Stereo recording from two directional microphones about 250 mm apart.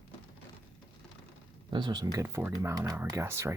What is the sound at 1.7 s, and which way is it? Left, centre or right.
Speech, centre.